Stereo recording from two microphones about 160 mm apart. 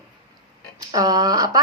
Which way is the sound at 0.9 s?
20° right (ahead or behind).